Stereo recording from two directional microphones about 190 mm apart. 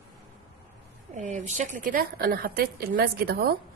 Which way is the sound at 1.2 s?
40° right (ahead or behind).